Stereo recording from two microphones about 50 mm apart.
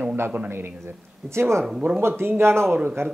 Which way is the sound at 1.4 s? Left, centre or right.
Right.